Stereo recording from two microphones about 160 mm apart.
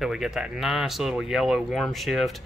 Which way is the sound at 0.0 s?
5° right (ahead or behind).